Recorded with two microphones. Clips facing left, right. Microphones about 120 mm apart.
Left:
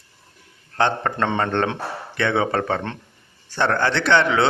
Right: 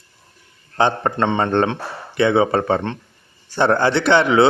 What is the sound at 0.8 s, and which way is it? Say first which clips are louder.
Speech: right 3 dB; 10° right (ahead or behind).